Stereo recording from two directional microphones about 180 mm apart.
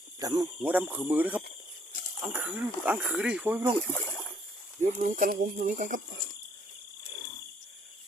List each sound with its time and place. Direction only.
0.2 s speech: 20° right (ahead or behind)
0.6 s speech: 10° right (ahead or behind)
3.8 s speech: 10° left (ahead or behind)
4.8 s speech: 45° right (ahead or behind)